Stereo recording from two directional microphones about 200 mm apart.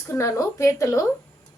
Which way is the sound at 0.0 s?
15° left (ahead or behind).